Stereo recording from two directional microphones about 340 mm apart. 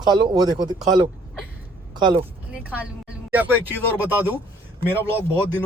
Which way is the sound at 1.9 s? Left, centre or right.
Centre.